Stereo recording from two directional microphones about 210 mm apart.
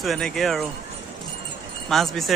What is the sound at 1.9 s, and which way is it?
Speech, centre (ahead or behind).